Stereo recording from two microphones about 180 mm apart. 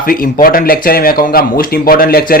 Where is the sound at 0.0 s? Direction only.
50° left (ahead or behind).